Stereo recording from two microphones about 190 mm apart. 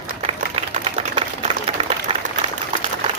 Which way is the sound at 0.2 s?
30° right (ahead or behind).